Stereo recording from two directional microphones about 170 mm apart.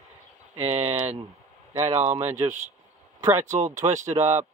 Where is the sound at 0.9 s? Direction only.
10° right (ahead or behind).